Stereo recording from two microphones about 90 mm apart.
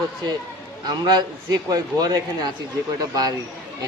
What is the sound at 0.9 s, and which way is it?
A man's voice, 55° right (ahead or behind).